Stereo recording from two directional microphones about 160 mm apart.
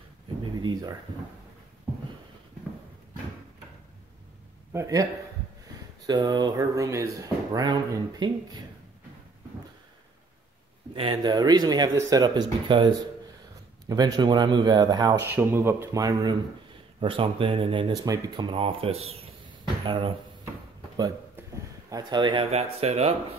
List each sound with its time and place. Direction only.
0.4 s a sound: 30° right (ahead or behind)
4.7 s speech: 20° right (ahead or behind)
6.0 s speech: 25° right (ahead or behind)
11.0 s speech: 30° right (ahead or behind)
15.1 s speech: 15° right (ahead or behind); by 20.2 s 30° right (ahead or behind)
21.9 s speech: 25° right (ahead or behind)